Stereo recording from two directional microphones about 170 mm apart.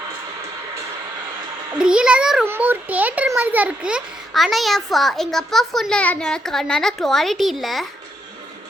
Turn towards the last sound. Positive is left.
turn(degrees=0)  # may be behind; listen again after turning